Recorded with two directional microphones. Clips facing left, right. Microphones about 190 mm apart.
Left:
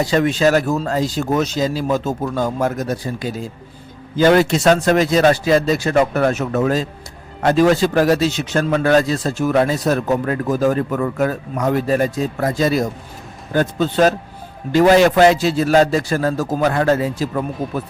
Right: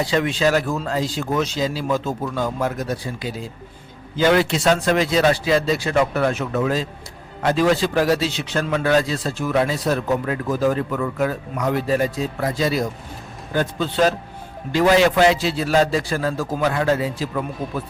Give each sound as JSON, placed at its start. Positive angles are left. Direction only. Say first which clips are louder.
{"t": 0.0, "sound": "a man's voice", "louder": "left 4 dB", "side_deg": 45}